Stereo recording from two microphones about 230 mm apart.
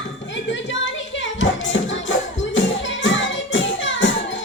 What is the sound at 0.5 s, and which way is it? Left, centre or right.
Music, left.